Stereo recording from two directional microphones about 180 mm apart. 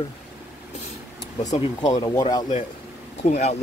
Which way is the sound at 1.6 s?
20° left (ahead or behind).